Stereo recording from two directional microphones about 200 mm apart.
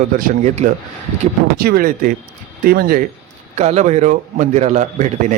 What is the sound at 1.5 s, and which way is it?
Speech, 50° right (ahead or behind).